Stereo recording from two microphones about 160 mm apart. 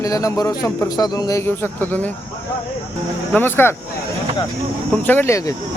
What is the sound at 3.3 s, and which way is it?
Speech, 10° left (ahead or behind).